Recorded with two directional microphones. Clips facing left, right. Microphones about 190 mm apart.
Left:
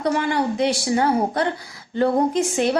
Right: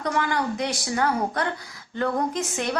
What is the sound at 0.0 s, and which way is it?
Speech, 25° left (ahead or behind).